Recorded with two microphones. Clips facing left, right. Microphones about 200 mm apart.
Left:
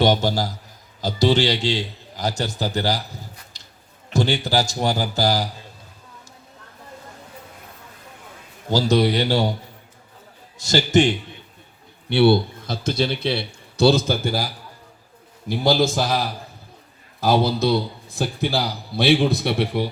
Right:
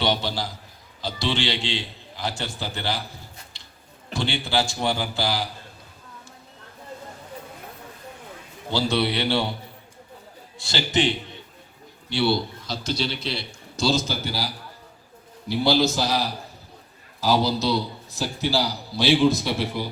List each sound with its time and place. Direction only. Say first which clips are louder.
0.0 s a man's voice: left 6 dB; 45° left (ahead or behind)
3.5 s a sound: left 1 dB; 40° left (ahead or behind)
4.1 s a man's voice: left 5 dB; 40° left (ahead or behind)
8.7 s a man's voice: left 5 dB; 40° left (ahead or behind)
10.6 s a man's voice: left 6 dB; 45° left (ahead or behind); by 19.9 s 60° left (ahead or behind)